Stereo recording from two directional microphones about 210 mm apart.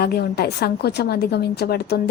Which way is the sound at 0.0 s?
50° left (ahead or behind).